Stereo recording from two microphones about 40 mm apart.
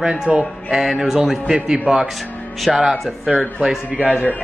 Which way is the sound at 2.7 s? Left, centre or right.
Centre.